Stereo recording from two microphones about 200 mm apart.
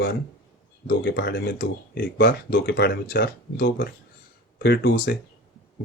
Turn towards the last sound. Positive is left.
turn(degrees=55)  # may be behind; listen again after turning